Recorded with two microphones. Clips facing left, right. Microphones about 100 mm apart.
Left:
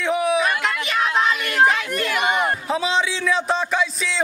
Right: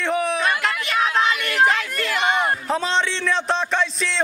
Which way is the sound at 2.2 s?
Centre (ahead or behind).